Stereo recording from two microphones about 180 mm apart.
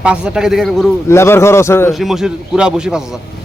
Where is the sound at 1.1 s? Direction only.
15° left (ahead or behind).